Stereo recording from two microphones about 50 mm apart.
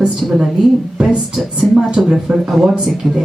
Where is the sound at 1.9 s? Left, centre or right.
Centre.